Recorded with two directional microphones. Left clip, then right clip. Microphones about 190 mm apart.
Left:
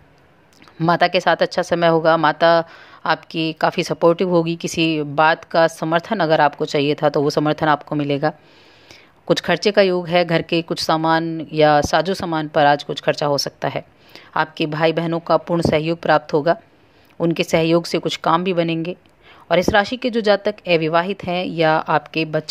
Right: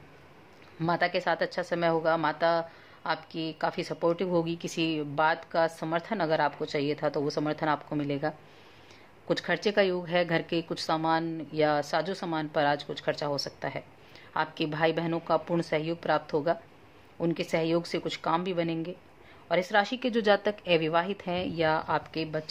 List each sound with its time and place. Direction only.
0.7 s a woman's voice: 30° left (ahead or behind)